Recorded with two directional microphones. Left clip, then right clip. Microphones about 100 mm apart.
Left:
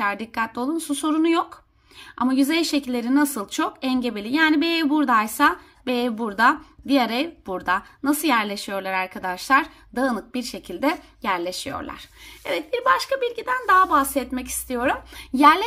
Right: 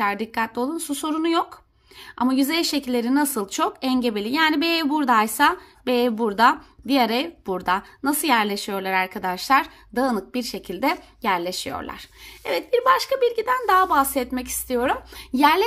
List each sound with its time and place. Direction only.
0.0 s a woman's voice: 25° right (ahead or behind)